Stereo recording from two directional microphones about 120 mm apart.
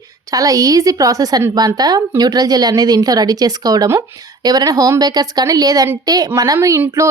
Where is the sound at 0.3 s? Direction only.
30° right (ahead or behind).